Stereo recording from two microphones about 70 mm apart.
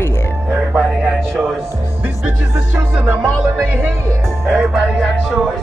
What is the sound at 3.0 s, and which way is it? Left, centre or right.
Speech, right.